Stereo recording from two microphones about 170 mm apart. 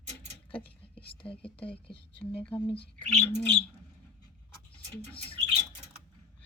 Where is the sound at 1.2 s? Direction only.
30° left (ahead or behind).